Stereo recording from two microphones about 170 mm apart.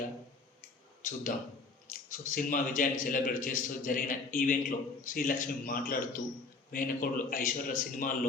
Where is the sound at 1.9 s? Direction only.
50° left (ahead or behind).